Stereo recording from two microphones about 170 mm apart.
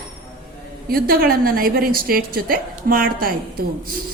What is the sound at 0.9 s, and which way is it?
A woman's voice, 60° right (ahead or behind).